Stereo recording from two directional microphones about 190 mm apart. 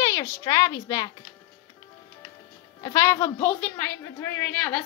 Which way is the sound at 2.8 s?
15° left (ahead or behind).